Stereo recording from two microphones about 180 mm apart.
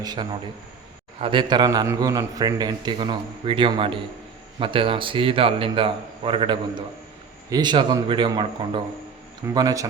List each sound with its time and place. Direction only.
0.0 s a man's voice: 20° right (ahead or behind)